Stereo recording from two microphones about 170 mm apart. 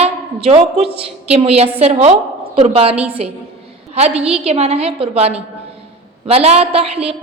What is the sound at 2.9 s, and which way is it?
Speech, 10° right (ahead or behind).